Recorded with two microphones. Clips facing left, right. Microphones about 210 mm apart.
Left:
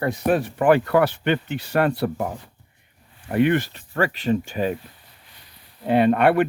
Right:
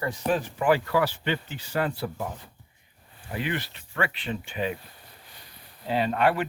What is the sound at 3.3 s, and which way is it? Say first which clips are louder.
Speech: left 12 dB; 55° left (ahead or behind).